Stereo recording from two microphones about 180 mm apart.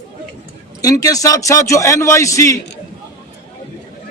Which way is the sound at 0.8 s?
20° left (ahead or behind).